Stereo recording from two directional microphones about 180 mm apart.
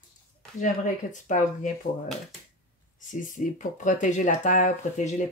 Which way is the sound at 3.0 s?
45° left (ahead or behind).